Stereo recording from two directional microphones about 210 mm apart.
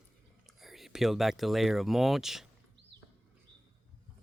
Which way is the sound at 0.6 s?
Centre (ahead or behind).